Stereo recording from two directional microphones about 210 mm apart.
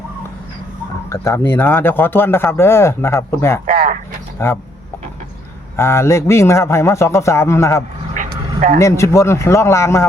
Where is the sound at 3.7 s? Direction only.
40° right (ahead or behind).